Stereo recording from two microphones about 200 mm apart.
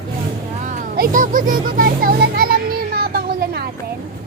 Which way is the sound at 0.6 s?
45° right (ahead or behind).